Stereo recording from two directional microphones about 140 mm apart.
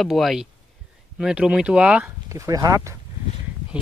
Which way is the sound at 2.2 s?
20° right (ahead or behind).